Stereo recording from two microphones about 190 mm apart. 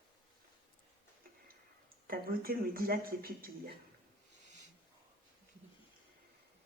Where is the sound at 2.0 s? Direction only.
50° right (ahead or behind).